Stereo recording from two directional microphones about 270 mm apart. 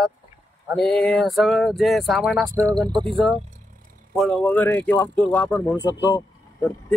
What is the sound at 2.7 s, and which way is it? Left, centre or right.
Speech, centre.